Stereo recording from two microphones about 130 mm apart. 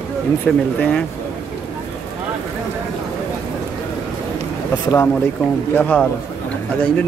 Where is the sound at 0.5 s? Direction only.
5° left (ahead or behind).